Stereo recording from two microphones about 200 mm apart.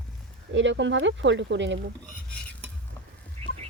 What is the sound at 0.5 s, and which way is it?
Speech, 65° right (ahead or behind).